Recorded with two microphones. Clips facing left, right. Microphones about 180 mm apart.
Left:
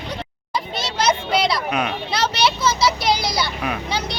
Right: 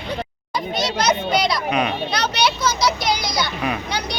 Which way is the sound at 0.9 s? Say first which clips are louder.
Left 1 dB; 30° left (ahead or behind).